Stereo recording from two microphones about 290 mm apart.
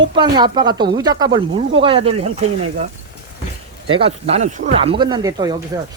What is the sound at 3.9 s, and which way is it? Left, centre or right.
Speech, centre.